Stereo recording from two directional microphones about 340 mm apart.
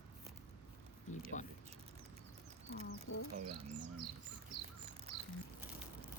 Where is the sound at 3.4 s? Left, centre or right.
Centre.